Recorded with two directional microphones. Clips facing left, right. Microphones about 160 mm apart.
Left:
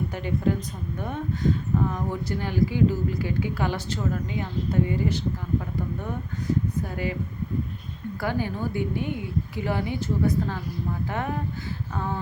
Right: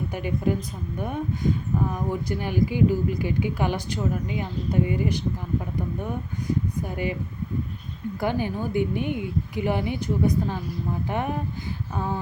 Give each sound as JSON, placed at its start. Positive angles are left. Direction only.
{"t": 0.1, "sound": "speech", "side_deg": -15}
{"t": 6.8, "sound": "speech", "side_deg": -20}
{"t": 8.2, "sound": "speech", "side_deg": -20}